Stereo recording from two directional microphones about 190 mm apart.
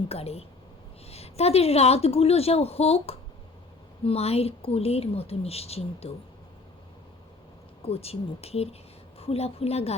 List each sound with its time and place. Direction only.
0.1 s a woman's voice: 30° left (ahead or behind)
7.8 s a woman's voice: 30° left (ahead or behind)